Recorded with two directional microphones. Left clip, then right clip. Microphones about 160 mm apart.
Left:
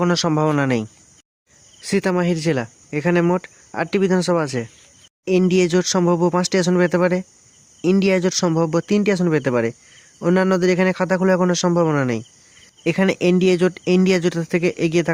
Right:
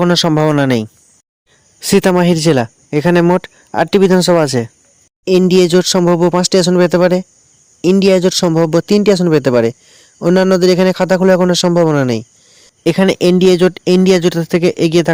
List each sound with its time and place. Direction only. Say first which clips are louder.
0.0 s speech: right 7 dB; 40° right (ahead or behind)
1.8 s speech: right 9 dB; 55° right (ahead or behind)